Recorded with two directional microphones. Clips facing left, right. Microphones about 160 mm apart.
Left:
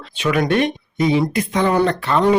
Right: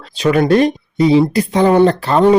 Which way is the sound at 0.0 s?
35° right (ahead or behind).